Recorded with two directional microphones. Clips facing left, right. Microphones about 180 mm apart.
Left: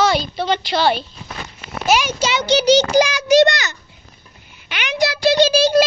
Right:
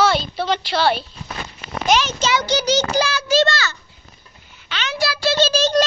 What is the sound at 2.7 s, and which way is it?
A child's voice, 15° left (ahead or behind).